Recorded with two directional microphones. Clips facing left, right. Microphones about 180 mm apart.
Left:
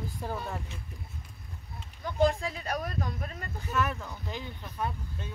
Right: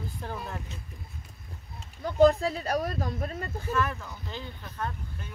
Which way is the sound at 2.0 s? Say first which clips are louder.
Right 6 dB; 40° right (ahead or behind).